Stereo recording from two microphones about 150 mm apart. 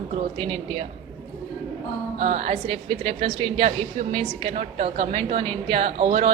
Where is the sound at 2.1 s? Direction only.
45° right (ahead or behind).